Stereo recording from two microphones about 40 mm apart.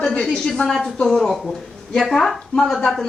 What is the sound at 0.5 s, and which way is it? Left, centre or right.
Speech, centre.